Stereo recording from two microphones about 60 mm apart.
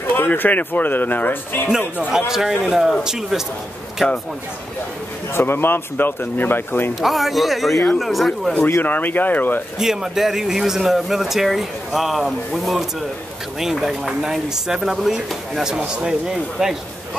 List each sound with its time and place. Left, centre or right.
0.1 s speech: left
2.0 s speech: centre
5.3 s speech: left
7.0 s speech: centre
8.8 s speech: left
9.8 s speech: centre